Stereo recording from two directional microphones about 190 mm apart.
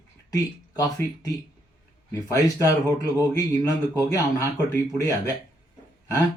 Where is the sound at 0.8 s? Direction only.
15° left (ahead or behind).